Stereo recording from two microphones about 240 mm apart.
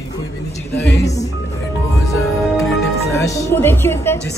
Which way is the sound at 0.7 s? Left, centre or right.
Left.